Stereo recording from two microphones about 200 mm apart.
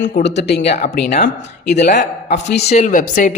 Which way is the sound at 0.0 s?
60° left (ahead or behind).